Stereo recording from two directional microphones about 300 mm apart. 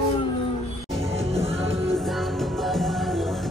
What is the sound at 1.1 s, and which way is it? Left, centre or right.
Music, centre.